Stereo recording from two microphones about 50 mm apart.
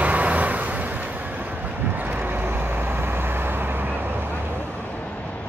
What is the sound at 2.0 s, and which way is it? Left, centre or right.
Vehicle, right.